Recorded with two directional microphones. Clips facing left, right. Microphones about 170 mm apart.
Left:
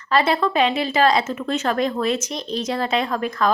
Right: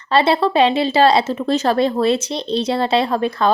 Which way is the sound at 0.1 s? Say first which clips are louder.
Right 4 dB; 30° right (ahead or behind).